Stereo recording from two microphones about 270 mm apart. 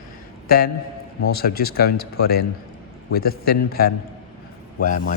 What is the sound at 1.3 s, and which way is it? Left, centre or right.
Speech, left.